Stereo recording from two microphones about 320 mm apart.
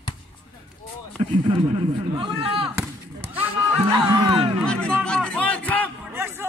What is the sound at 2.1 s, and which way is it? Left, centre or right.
Speech, centre.